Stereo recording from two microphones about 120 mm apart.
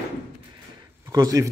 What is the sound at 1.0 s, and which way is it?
Speech, 30° right (ahead or behind).